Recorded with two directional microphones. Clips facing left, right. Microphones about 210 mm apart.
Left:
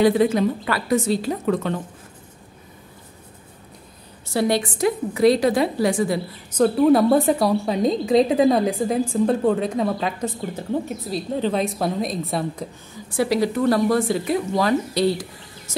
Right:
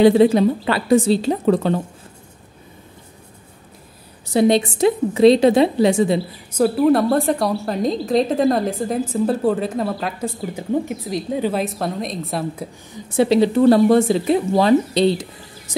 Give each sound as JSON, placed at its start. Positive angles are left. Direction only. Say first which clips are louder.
{"t": 0.0, "sound": "speech", "louder": "right 5 dB", "side_deg": -30}
{"t": 4.3, "sound": "speech", "louder": "right 5 dB", "side_deg": -20}
{"t": 6.5, "sound": "a woman's voice", "louder": "even", "side_deg": -5}
{"t": 12.9, "sound": "speech", "louder": "right 6 dB", "side_deg": -25}